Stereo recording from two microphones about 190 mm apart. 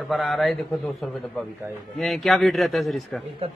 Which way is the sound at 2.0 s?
Centre (ahead or behind).